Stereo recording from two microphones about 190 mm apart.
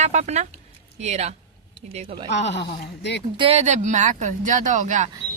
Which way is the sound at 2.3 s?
65° left (ahead or behind).